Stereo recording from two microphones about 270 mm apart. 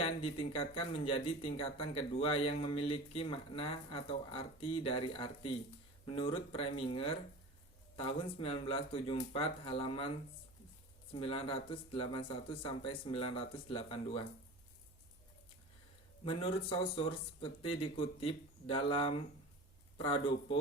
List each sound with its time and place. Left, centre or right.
0.0 s speech: left
11.1 s speech: left
16.2 s speech: left